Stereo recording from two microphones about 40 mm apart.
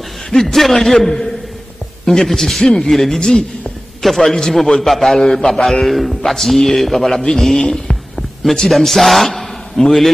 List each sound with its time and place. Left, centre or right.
0.3 s a man's voice: centre
3.2 s a man's voice: centre
4.0 s a man's voice: centre
7.5 s a sound: centre
8.6 s a man's voice: centre